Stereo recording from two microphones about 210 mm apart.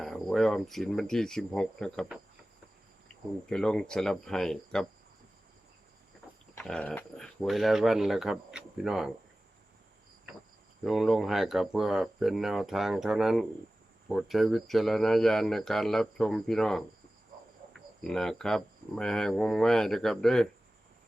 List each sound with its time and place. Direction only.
0.0 s speech: centre (ahead or behind)
3.5 s speech: 5° left (ahead or behind)
6.6 s speech: 5° left (ahead or behind)
10.8 s speech: centre (ahead or behind)